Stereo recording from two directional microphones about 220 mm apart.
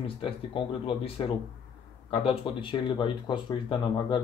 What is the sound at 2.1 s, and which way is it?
Speech, 25° left (ahead or behind).